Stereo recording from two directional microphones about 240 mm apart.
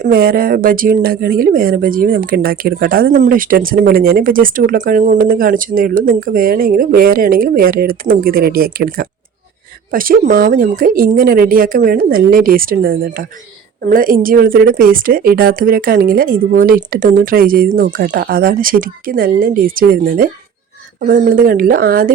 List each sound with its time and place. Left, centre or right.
0.0 s speech: right